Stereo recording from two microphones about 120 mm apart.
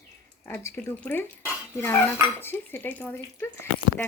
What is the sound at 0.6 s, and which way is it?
Speech, 15° left (ahead or behind).